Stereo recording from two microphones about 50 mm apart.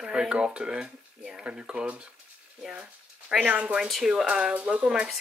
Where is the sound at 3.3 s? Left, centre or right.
Right.